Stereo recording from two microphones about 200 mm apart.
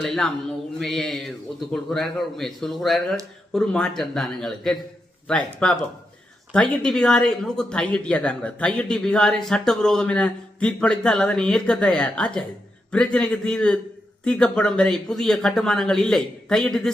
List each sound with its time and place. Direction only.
0.0 s speech: centre (ahead or behind)